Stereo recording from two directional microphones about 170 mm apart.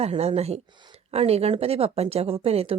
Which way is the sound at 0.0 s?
35° right (ahead or behind).